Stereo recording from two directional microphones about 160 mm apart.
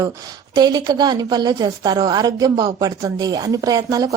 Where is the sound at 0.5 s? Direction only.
25° right (ahead or behind).